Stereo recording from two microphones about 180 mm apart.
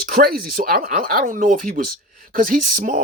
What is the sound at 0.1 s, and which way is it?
Speech, 55° right (ahead or behind).